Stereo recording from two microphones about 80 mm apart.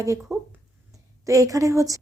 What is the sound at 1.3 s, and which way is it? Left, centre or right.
Speech, right.